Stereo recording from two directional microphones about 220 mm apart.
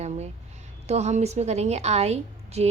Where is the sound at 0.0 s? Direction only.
30° right (ahead or behind).